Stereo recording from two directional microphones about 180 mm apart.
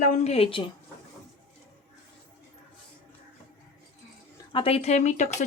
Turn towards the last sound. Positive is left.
turn(degrees=40)  # may be behind; listen again after turning